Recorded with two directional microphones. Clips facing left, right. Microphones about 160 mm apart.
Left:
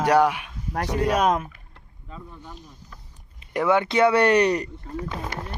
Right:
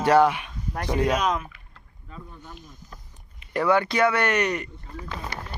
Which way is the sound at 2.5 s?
35° left (ahead or behind).